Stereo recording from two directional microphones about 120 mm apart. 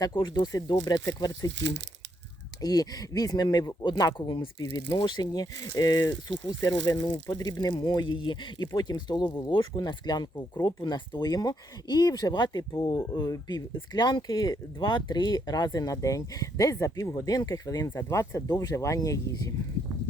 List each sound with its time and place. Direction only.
0.0 s speech: 35° left (ahead or behind)
2.6 s speech: 30° left (ahead or behind)